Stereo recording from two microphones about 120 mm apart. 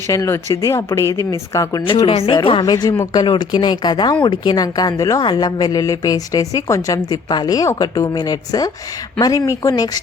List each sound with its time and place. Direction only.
0.1 s speech: 25° left (ahead or behind)
1.1 s speech: 30° right (ahead or behind)
1.9 s a woman's voice: 45° left (ahead or behind); by 9.9 s 30° left (ahead or behind)